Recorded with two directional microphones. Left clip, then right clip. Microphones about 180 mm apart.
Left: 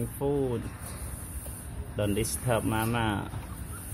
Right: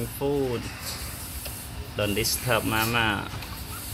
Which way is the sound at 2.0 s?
15° left (ahead or behind).